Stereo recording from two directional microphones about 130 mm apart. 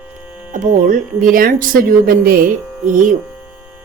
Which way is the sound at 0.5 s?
85° right.